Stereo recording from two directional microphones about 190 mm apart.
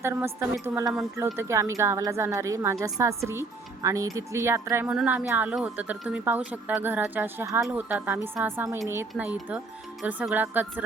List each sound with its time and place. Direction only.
0.0 s speech: 15° right (ahead or behind)